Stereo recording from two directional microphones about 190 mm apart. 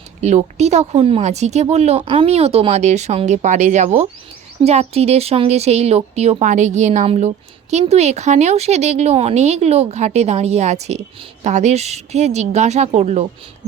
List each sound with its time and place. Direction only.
0.2 s speech: 35° right (ahead or behind)